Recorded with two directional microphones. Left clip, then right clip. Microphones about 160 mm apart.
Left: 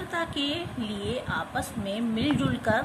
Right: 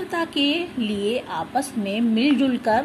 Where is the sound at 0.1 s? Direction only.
20° right (ahead or behind).